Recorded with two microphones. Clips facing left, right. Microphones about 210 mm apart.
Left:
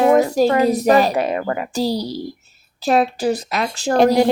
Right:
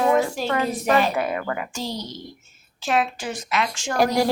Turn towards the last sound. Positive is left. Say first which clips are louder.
# left 6 dB
turn(degrees=25)  # may be behind; listen again after turning